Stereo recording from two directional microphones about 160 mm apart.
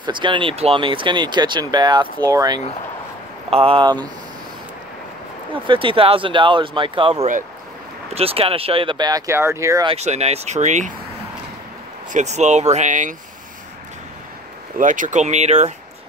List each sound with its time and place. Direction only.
0.0 s speech: 30° right (ahead or behind)
3.4 s speech: 35° right (ahead or behind)
5.5 s speech: 30° right (ahead or behind)
9.8 s speech: 45° right (ahead or behind)
12.1 s speech: 45° right (ahead or behind)
14.8 s speech: 55° right (ahead or behind)